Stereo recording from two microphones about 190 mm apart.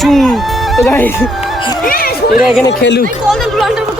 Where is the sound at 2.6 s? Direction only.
65° left (ahead or behind).